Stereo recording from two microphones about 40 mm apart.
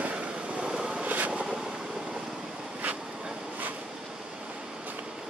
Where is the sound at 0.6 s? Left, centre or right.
Centre.